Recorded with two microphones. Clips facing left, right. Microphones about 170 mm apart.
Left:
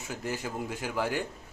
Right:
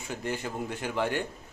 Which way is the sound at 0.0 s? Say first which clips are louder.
Right 1 dB; 5° left (ahead or behind).